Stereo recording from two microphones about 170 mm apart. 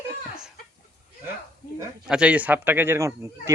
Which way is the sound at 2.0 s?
5° right (ahead or behind).